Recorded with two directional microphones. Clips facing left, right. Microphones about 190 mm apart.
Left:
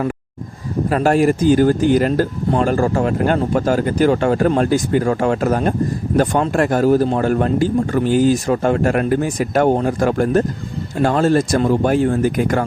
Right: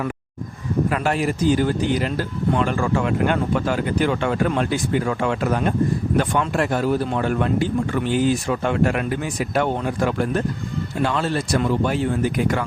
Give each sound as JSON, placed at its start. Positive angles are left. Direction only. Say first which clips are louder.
{"t": 0.9, "sound": "speech", "louder": "left 10 dB", "side_deg": 40}